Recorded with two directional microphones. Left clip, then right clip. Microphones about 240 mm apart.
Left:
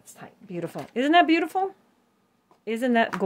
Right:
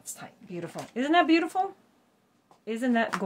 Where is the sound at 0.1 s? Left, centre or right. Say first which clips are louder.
Left 3 dB; left.